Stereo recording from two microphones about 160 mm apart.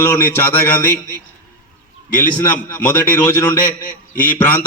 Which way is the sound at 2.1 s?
10° left (ahead or behind).